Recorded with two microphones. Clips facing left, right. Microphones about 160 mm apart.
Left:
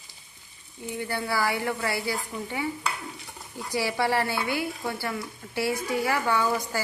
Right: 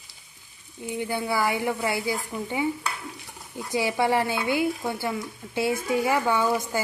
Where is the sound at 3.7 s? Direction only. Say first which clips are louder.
Right 2 dB; 20° right (ahead or behind).